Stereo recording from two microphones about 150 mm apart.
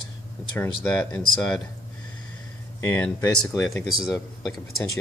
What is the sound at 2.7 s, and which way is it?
Speech, 15° left (ahead or behind).